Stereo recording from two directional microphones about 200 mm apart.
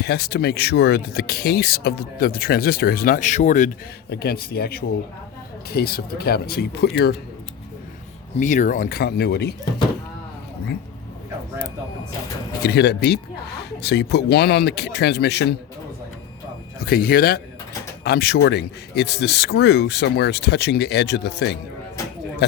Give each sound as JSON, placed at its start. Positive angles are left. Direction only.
{"t": 0.0, "sound": "speech", "side_deg": 55}
{"t": 4.1, "sound": "speech", "side_deg": 50}
{"t": 8.4, "sound": "speech", "side_deg": 40}
{"t": 12.6, "sound": "speech", "side_deg": 55}
{"t": 16.8, "sound": "speech", "side_deg": 45}